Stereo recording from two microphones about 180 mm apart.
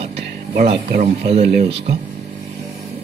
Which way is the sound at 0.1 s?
65° right (ahead or behind).